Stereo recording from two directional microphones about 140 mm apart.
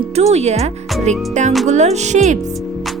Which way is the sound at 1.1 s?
55° right (ahead or behind).